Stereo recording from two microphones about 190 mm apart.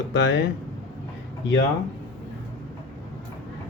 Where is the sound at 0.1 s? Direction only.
70° left (ahead or behind).